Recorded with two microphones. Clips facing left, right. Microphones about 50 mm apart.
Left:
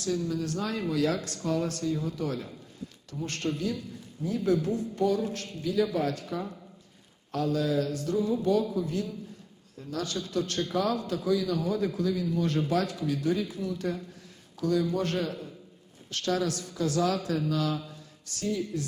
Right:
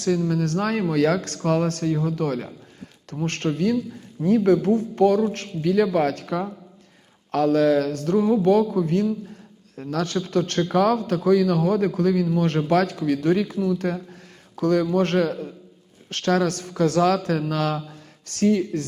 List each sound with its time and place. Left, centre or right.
0.0 s a man's voice: right